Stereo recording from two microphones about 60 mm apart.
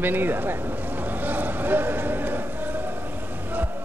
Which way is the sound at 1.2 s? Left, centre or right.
Right.